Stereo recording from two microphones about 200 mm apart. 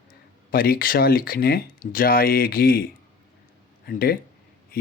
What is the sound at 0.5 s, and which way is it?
Speech, 45° left (ahead or behind).